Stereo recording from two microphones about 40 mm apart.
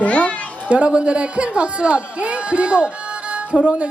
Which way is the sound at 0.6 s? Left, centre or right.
Right.